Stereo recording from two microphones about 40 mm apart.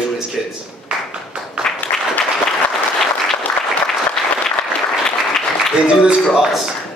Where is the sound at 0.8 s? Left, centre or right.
Right.